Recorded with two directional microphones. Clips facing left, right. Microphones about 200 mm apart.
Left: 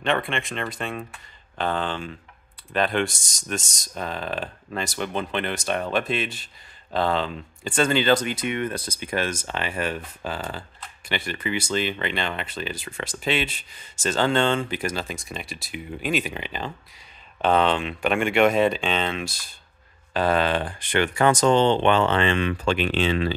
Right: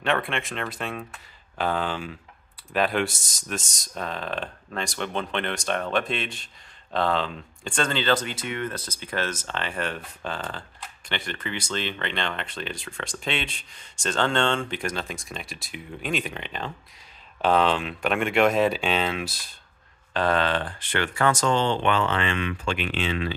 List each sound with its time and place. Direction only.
0.0 s speech: 5° right (ahead or behind)
20.2 s speech: 10° left (ahead or behind); by 23.3 s 35° left (ahead or behind)